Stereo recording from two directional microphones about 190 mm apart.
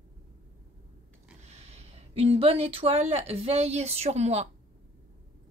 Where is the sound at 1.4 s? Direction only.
35° right (ahead or behind).